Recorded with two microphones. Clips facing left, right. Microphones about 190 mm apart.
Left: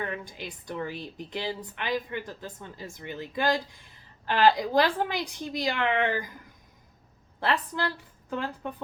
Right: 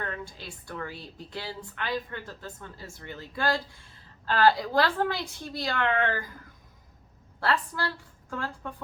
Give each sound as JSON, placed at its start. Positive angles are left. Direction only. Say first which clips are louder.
{"t": 0.0, "sound": "a woman's voice", "louder": "left 2 dB", "side_deg": 15}